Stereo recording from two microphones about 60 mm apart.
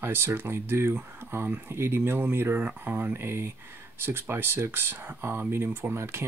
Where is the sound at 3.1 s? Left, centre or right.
Right.